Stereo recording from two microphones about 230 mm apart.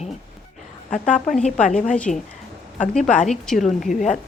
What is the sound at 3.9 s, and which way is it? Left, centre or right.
Speech, left.